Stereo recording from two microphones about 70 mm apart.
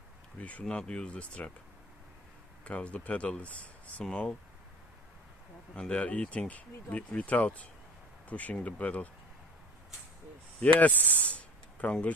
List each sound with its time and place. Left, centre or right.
0.4 s speech: left
2.6 s speech: centre
5.8 s speech: centre
10.6 s speech: left